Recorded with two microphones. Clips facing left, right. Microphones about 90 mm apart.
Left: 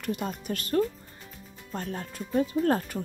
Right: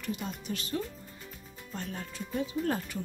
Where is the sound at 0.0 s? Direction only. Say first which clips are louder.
Left 5 dB; 55° left (ahead or behind).